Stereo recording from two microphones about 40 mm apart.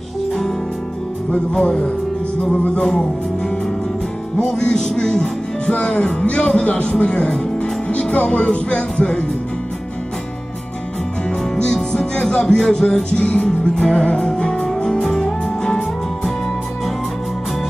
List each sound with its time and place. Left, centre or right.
1.3 s music: centre
2.5 s music: left
4.6 s speech: left
6.2 s music: left
6.6 s speech: left
7.2 s music: left
11.2 s music: centre